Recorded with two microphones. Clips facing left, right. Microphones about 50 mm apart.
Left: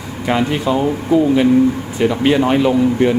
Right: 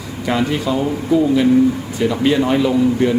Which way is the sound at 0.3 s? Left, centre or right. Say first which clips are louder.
Left 2 dB; left.